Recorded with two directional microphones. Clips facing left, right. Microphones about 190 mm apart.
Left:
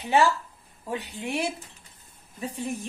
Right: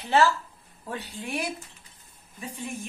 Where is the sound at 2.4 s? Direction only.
40° left (ahead or behind).